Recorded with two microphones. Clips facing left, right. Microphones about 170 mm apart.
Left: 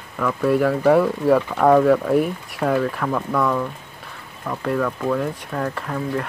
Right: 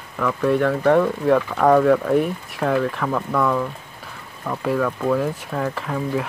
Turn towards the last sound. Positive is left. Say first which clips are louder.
# right 1 dB
turn(degrees=0)  # may be behind; listen again after turning